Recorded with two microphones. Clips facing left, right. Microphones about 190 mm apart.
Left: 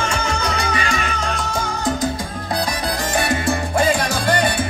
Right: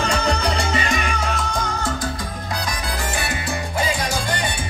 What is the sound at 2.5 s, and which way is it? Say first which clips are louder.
Salsa music: left 6 dB; 35° left (ahead or behind).